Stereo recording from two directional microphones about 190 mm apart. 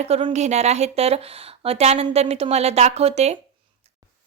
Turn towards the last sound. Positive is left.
turn(degrees=-35)  # may be behind; listen again after turning